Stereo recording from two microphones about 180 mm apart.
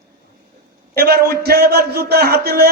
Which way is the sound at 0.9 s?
60° right (ahead or behind).